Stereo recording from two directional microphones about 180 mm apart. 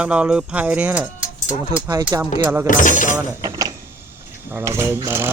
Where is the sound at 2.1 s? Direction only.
20° right (ahead or behind).